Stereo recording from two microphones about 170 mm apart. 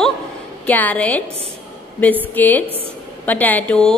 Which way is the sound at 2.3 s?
10° left (ahead or behind).